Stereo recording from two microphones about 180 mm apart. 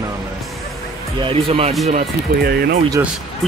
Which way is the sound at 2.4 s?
60° right (ahead or behind).